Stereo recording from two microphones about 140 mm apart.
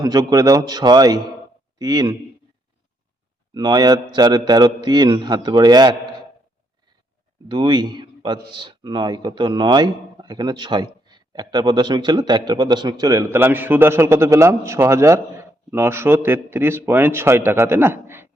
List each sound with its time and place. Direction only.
0.0 s a man's voice: 25° right (ahead or behind)
3.5 s a man's voice: 30° right (ahead or behind)
7.4 s a man's voice: 35° right (ahead or behind); by 18.3 s 15° right (ahead or behind)